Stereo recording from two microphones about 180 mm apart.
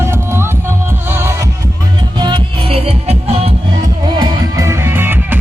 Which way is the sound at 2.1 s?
25° right (ahead or behind).